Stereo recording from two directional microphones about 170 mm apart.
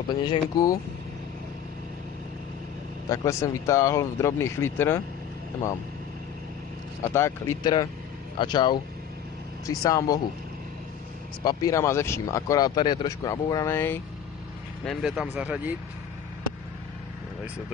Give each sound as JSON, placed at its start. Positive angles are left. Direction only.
{"t": 0.1, "sound": "speech", "side_deg": 25}
{"t": 3.1, "sound": "speech", "side_deg": 20}
{"t": 7.0, "sound": "speech", "side_deg": 15}
{"t": 11.4, "sound": "speech", "side_deg": 20}
{"t": 14.9, "sound": "speech", "side_deg": -5}